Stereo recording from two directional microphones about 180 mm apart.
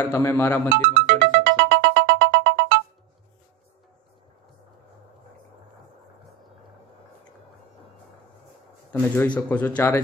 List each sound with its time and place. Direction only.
0.0 s speech: 15° left (ahead or behind)
1.0 s music: 80° right
8.9 s speech: 10° left (ahead or behind)